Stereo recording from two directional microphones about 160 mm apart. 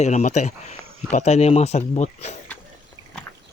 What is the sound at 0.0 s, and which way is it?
Speech, 45° left (ahead or behind).